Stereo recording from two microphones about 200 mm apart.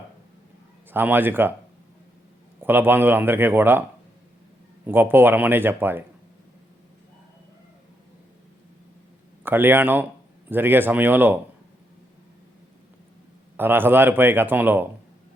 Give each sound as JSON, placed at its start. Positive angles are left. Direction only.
{"t": 0.9, "sound": "speech", "side_deg": -10}
{"t": 2.6, "sound": "speech", "side_deg": -10}
{"t": 4.9, "sound": "speech", "side_deg": -10}
{"t": 9.4, "sound": "speech", "side_deg": -10}
{"t": 13.6, "sound": "speech", "side_deg": -10}